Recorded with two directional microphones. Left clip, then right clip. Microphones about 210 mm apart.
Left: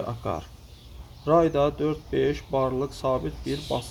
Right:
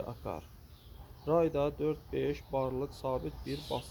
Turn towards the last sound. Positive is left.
turn(degrees=-35)  # may be behind; listen again after turning